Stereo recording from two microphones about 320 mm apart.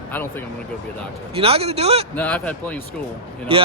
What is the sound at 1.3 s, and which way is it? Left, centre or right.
Speech, centre.